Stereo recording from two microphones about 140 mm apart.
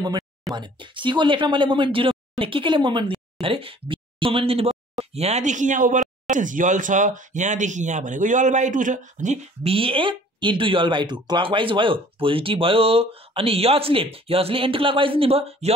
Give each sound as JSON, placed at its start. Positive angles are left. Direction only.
{"t": 0.0, "sound": "speech", "side_deg": -30}